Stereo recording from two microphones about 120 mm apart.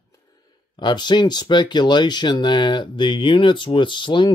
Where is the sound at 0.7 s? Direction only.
40° left (ahead or behind).